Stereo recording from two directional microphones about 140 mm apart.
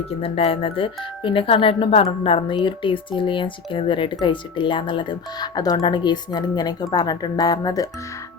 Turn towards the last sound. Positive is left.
turn(degrees=25)  # may be behind; listen again after turning